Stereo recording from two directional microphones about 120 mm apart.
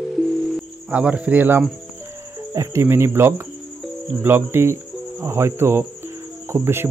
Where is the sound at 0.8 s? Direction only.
10° right (ahead or behind).